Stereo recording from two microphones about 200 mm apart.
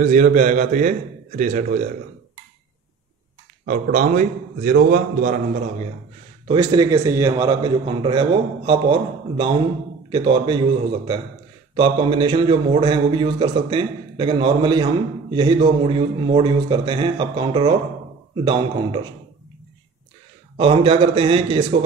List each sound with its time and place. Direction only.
0.0 s a man's voice: 40° right (ahead or behind)
3.6 s a man's voice: 40° right (ahead or behind)
6.4 s a man's voice: 20° right (ahead or behind)
10.0 s a man's voice: 20° right (ahead or behind)
11.7 s a man's voice: 25° right (ahead or behind)
20.5 s a man's voice: 25° right (ahead or behind)